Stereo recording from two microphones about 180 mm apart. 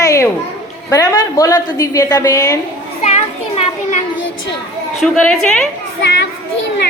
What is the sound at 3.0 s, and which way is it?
Children playing, 40° left (ahead or behind).